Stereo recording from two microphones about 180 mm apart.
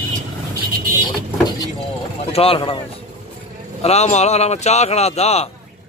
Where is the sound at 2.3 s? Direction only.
30° left (ahead or behind).